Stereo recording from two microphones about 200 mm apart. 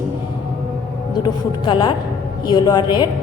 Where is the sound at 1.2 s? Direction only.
25° left (ahead or behind).